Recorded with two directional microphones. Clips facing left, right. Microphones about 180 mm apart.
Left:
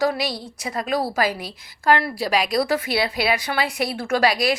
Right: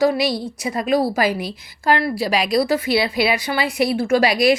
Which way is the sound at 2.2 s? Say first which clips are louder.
Right 2 dB; 45° left (ahead or behind).